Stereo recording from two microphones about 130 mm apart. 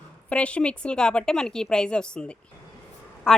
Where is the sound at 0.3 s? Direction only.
10° left (ahead or behind).